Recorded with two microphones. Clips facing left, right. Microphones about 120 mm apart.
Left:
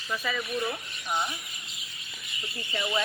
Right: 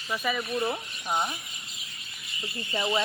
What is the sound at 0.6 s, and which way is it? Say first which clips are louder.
Speech: right 3 dB; 30° right (ahead or behind).